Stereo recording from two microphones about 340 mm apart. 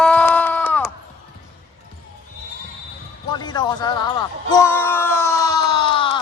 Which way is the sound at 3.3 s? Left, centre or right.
Centre.